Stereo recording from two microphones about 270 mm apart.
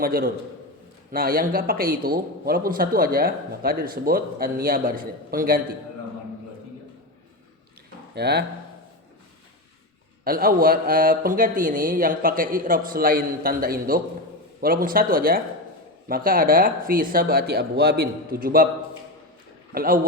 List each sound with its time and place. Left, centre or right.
0.0 s speech: right
8.1 s speech: right
10.2 s speech: right
19.7 s speech: right